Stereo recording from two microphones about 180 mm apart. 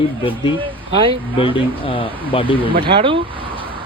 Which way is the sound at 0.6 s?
30° right (ahead or behind).